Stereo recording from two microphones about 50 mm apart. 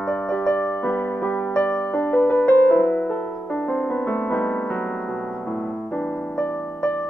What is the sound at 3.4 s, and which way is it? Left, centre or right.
Music, left.